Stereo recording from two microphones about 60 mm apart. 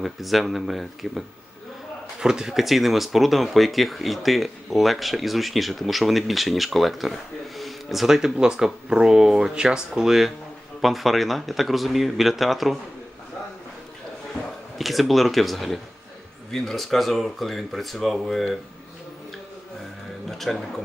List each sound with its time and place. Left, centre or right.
0.0 s speech: centre
2.2 s speech: centre
14.8 s speech: centre
20.2 s speech: centre